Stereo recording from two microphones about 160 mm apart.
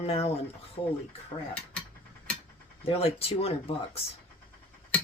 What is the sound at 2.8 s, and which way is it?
Speech, 35° left (ahead or behind).